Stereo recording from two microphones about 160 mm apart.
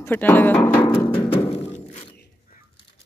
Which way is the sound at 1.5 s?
40° left (ahead or behind).